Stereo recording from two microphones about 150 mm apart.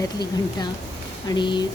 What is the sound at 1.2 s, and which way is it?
Speech, 30° left (ahead or behind).